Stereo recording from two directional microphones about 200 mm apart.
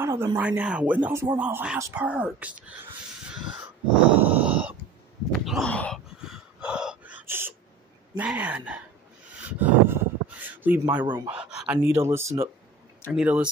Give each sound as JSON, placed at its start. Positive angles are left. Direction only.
{"t": 0.0, "sound": "a sound", "side_deg": -10}
{"t": 0.4, "sound": "speech", "side_deg": -5}
{"t": 3.3, "sound": "wheeze", "side_deg": -5}
{"t": 4.2, "sound": "a sound", "side_deg": -10}
{"t": 5.4, "sound": "gasp", "side_deg": 0}
{"t": 8.2, "sound": "speech", "side_deg": -5}
{"t": 9.4, "sound": "a sound", "side_deg": -5}
{"t": 11.1, "sound": "speech", "side_deg": -25}
{"t": 11.3, "sound": "speech", "side_deg": -5}